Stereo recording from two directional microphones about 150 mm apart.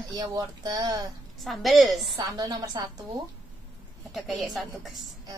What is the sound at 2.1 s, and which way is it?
Speech, 25° right (ahead or behind).